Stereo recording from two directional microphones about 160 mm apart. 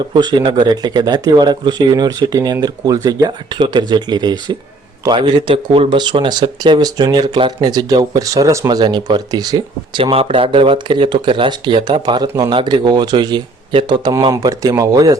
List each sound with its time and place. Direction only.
0.0 s speech: 30° right (ahead or behind)